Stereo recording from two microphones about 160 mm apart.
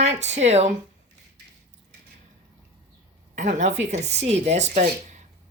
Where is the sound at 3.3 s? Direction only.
50° right (ahead or behind).